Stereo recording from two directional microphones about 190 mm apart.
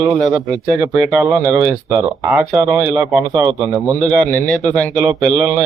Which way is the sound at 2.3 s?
5° right (ahead or behind).